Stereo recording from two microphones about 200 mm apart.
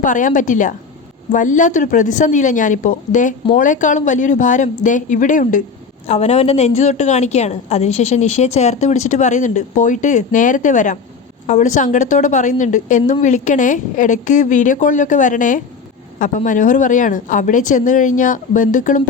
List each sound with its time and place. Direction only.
0.0 s a woman's voice: 40° left (ahead or behind)